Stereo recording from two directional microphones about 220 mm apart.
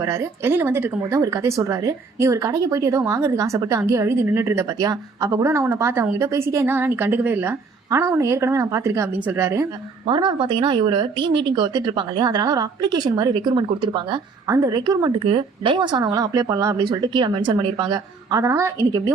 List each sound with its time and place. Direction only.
0.0 s a woman's voice: 15° right (ahead or behind)